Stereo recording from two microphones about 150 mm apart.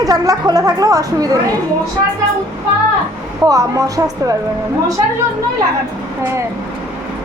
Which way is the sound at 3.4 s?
20° right (ahead or behind).